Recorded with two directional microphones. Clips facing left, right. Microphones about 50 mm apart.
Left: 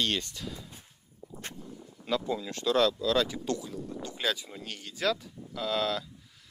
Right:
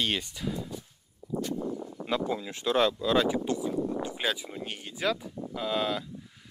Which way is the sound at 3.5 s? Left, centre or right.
Centre.